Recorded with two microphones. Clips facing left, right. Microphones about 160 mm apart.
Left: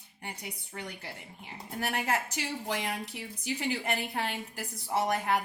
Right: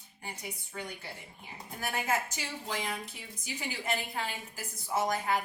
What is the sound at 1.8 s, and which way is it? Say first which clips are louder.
A woman's voice: left 1 dB; 65° left (ahead or behind).